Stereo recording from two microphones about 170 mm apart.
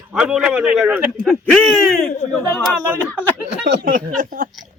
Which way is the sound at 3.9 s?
55° right (ahead or behind).